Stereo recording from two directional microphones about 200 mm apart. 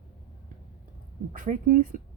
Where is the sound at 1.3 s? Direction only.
40° right (ahead or behind).